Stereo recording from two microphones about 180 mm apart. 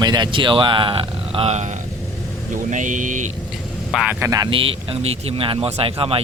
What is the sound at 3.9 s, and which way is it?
Speech, centre (ahead or behind).